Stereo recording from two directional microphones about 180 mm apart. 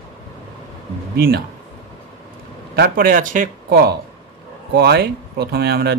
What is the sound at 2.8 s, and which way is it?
Speech, 55° right (ahead or behind).